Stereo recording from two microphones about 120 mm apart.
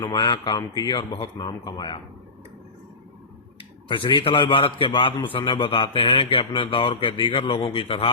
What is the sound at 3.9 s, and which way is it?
A man's voice, 40° left (ahead or behind).